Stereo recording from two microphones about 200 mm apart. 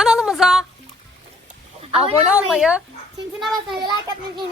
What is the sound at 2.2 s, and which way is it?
Speech, 5° right (ahead or behind).